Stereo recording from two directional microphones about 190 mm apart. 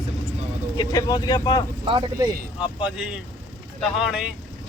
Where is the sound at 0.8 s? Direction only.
20° left (ahead or behind).